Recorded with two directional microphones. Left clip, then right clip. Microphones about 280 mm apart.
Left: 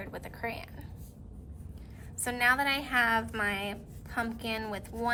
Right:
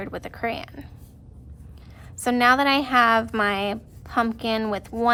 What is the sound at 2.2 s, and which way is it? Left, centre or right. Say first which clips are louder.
A woman's voice: right 9 dB; centre.